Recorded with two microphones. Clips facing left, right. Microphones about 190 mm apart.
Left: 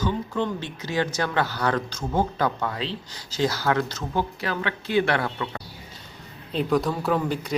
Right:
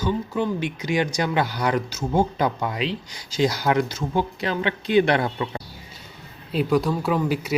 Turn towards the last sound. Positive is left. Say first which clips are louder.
# right 2 dB
turn(degrees=-5)  # may be behind; listen again after turning